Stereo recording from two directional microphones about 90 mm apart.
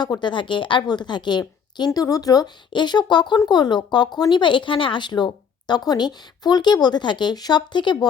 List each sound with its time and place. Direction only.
0.0 s a woman's voice: 55° left (ahead or behind)